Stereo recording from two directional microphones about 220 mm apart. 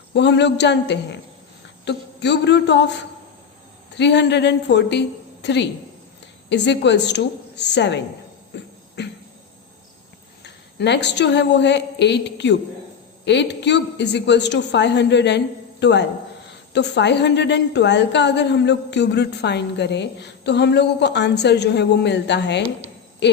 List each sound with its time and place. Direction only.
0.1 s a woman's voice: 50° left (ahead or behind)
3.9 s a woman's voice: 50° left (ahead or behind)
8.5 s cough: 50° left (ahead or behind)
9.0 s a sound: 50° left (ahead or behind)
10.4 s a woman's voice: 50° left (ahead or behind)